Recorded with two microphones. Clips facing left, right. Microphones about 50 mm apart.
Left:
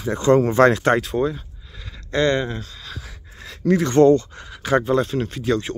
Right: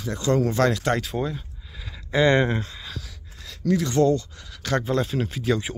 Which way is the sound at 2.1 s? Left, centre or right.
Centre.